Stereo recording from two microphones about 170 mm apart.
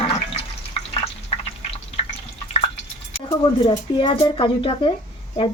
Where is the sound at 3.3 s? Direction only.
25° left (ahead or behind).